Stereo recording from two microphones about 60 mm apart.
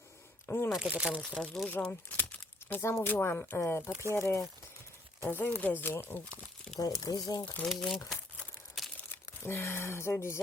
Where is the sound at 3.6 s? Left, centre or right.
Left.